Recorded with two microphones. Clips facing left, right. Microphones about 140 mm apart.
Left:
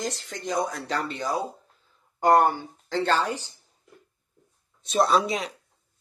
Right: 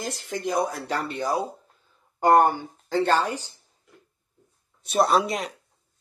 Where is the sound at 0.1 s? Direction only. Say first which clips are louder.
Right 6 dB; 65° right (ahead or behind).